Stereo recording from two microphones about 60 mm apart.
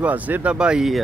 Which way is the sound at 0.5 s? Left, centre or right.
Centre.